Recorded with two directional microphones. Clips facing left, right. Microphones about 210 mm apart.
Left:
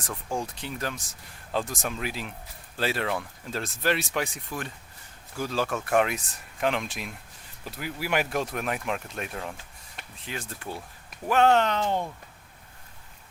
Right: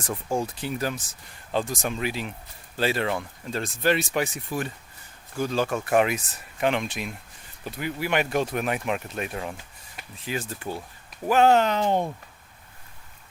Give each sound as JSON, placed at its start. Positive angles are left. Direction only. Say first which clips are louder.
{"t": 0.1, "sound": "speech", "louder": "right 4 dB", "side_deg": -20}
{"t": 0.5, "sound": "speech", "louder": "right 5 dB", "side_deg": -5}
{"t": 11.8, "sound": "speech", "louder": "right 4 dB", "side_deg": -20}